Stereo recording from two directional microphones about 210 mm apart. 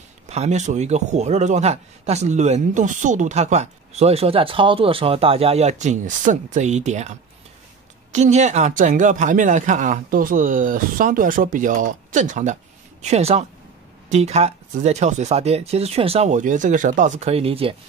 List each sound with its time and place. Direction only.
0.3 s a man's voice: 30° right (ahead or behind)